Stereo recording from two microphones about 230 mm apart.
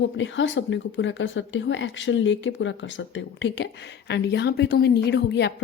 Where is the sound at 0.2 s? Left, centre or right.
Left.